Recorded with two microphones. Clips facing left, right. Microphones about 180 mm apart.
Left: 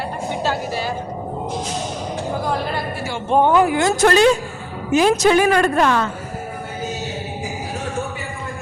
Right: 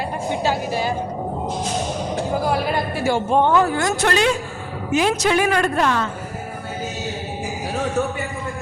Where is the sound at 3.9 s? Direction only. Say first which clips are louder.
Left 8 dB; 40° left (ahead or behind).